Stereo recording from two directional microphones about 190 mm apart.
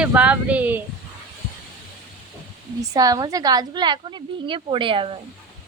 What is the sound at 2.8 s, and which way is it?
A woman's voice, 20° right (ahead or behind).